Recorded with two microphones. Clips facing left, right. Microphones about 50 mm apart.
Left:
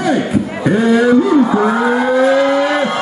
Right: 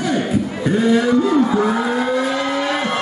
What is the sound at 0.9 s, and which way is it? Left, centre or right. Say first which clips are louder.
Vehicle: left 6 dB; centre.